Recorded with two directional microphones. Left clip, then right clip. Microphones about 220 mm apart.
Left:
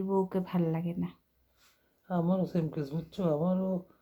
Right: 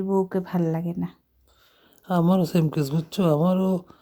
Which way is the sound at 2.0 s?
45° right (ahead or behind).